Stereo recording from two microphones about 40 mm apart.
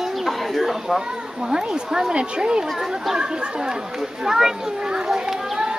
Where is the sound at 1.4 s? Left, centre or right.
Centre.